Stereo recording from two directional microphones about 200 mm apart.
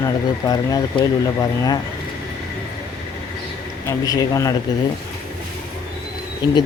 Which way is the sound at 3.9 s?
15° left (ahead or behind).